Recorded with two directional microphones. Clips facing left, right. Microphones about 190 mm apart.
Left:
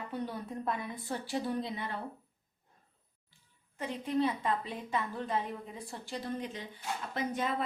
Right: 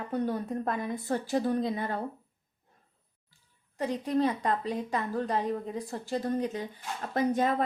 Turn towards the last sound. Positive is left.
turn(degrees=-45)  # may be behind; listen again after turning